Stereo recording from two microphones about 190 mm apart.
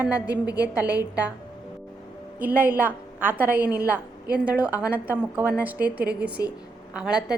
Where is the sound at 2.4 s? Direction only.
10° right (ahead or behind).